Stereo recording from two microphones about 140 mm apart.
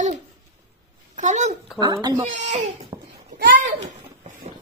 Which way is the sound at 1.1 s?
60° right (ahead or behind).